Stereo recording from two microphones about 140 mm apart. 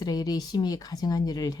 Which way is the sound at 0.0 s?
30° left (ahead or behind).